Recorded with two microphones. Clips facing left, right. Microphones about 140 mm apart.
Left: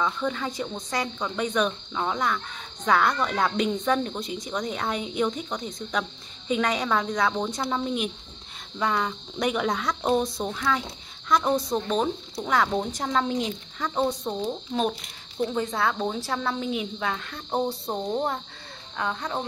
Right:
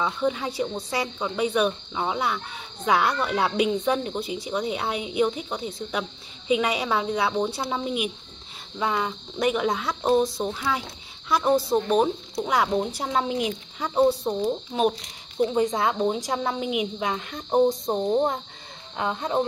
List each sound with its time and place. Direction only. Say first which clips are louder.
0.0 s speech: right 2 dB; 10° right (ahead or behind)